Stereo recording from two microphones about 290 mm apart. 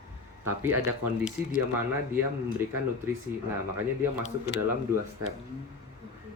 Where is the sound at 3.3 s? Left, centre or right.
Centre.